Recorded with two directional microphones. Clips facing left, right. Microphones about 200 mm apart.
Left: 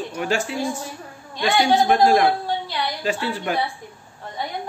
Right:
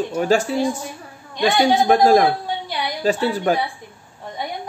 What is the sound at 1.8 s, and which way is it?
Speech, 45° right (ahead or behind).